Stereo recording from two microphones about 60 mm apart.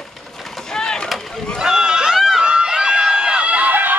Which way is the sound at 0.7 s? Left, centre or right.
Centre.